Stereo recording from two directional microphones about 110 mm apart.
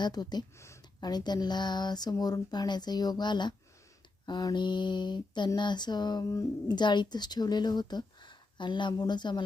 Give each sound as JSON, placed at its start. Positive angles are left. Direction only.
{"t": 0.0, "sound": "speech", "side_deg": 40}